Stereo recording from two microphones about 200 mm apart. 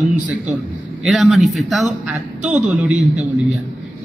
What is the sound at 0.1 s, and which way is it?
A man's voice, 5° right (ahead or behind).